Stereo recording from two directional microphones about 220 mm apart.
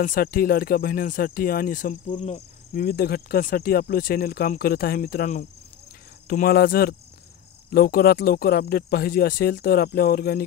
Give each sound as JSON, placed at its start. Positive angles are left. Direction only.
{"t": 0.0, "sound": "speech", "side_deg": 40}